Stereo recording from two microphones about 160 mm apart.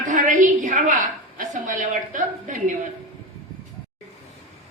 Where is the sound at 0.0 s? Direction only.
55° right (ahead or behind).